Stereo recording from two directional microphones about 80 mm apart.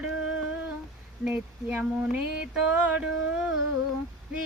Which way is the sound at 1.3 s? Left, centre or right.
Centre.